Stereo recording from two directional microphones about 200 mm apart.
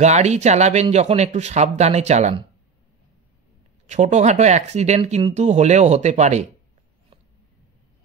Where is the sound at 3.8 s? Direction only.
35° right (ahead or behind).